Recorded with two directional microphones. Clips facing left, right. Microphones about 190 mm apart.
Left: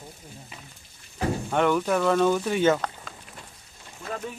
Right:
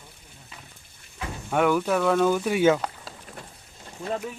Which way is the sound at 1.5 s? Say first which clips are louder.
Right 2 dB; 5° right (ahead or behind).